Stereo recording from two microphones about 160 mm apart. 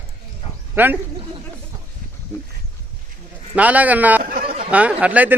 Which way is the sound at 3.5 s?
10° right (ahead or behind).